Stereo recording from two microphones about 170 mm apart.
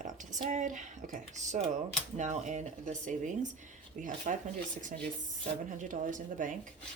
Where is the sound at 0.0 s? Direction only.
45° right (ahead or behind).